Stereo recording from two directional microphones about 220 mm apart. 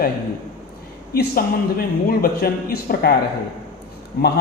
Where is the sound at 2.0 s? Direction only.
40° left (ahead or behind).